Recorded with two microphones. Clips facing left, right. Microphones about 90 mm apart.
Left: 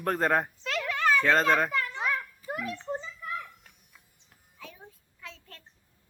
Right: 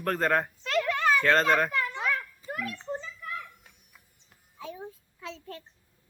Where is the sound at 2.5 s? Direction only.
20° left (ahead or behind).